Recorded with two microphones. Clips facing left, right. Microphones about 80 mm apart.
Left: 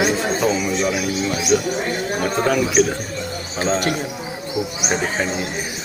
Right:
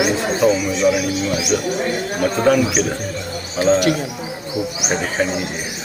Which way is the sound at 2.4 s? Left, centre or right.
Left.